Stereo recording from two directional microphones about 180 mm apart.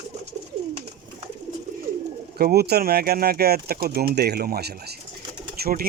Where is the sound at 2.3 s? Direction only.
60° right (ahead or behind).